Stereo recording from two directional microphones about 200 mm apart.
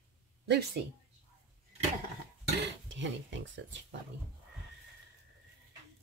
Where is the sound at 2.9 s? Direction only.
70° right (ahead or behind).